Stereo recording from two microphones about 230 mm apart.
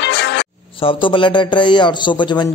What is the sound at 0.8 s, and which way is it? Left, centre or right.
A man's voice, left.